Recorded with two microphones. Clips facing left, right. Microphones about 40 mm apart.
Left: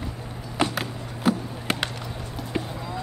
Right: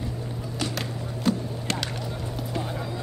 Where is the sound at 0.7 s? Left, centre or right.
Centre.